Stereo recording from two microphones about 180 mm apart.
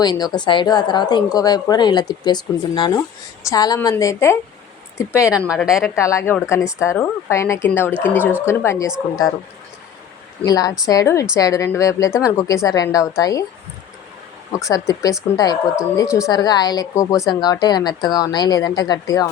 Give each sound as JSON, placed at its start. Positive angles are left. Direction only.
{"t": 0.0, "sound": "speech", "side_deg": 25}
{"t": 5.5, "sound": "a woman's voice", "side_deg": 0}
{"t": 5.9, "sound": "speech", "side_deg": 15}
{"t": 8.2, "sound": "speech", "side_deg": -10}
{"t": 8.4, "sound": "speech", "side_deg": 15}
{"t": 10.4, "sound": "speech", "side_deg": 20}
{"t": 14.5, "sound": "speech", "side_deg": 20}